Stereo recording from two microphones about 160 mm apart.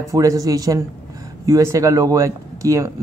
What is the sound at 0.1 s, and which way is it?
Speech, 20° right (ahead or behind).